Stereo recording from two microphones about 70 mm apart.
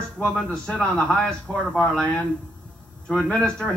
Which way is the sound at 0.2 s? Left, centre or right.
Centre.